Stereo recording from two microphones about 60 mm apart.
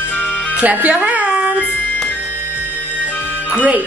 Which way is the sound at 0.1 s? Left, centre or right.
Left.